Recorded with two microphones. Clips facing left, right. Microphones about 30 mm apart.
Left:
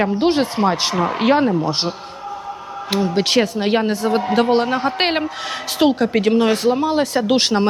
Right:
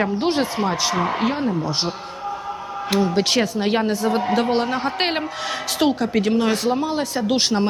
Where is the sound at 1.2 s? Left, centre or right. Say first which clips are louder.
Left 7 dB; left.